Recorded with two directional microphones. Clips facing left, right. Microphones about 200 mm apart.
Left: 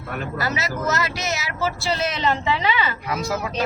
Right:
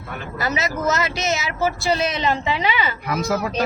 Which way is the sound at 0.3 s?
20° right (ahead or behind).